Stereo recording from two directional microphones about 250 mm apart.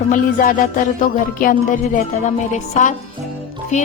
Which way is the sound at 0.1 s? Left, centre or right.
Left.